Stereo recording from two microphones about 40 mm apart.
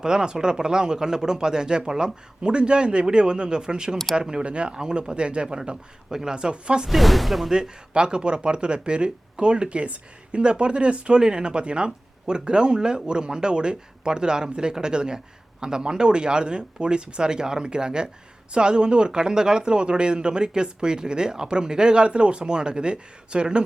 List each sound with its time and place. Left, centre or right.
0.0 s speech: centre
4.7 s speech: centre
6.8 s speech: centre
7.5 s speech: right